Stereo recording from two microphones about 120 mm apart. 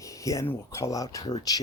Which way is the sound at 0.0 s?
25° left (ahead or behind).